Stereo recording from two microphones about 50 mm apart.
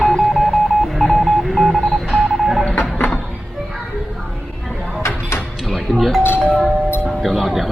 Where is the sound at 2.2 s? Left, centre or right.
Centre.